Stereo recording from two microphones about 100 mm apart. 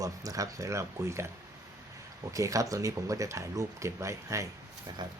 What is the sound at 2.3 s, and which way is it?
Speech, 35° right (ahead or behind).